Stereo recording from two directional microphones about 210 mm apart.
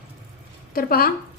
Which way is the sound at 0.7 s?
45° left (ahead or behind).